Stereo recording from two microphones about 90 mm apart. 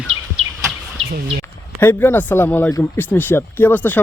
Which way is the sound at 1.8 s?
25° left (ahead or behind).